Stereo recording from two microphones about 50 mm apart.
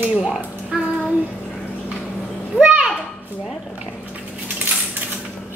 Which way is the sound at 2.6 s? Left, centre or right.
Right.